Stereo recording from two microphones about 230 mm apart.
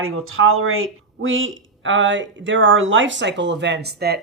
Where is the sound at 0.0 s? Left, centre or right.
Right.